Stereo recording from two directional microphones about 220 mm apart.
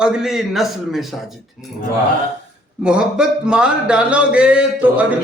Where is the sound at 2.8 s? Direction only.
5° right (ahead or behind).